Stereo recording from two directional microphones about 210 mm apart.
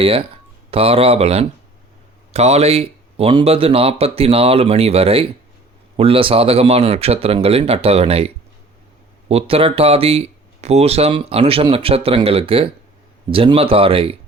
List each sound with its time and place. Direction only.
0.7 s speech: 25° right (ahead or behind)
9.3 s speech: 25° right (ahead or behind)